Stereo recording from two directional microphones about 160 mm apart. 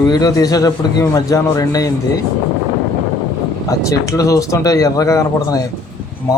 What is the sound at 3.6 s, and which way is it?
Speech, 20° left (ahead or behind).